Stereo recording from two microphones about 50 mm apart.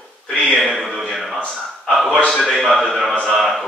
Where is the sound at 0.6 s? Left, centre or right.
Centre.